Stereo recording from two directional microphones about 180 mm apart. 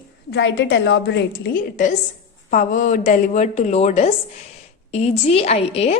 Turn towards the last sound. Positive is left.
turn(degrees=35)  # may be behind; listen again after turning